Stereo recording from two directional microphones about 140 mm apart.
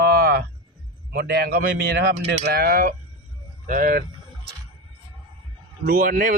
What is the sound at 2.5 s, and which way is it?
Speech, 90° right.